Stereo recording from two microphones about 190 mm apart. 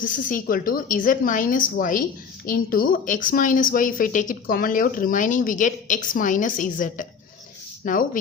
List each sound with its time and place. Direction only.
0.0 s speech: 45° left (ahead or behind)